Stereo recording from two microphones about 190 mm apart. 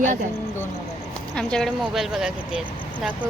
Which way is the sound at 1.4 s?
5° left (ahead or behind).